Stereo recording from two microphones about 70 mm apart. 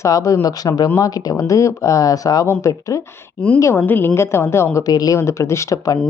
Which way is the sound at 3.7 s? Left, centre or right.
Left.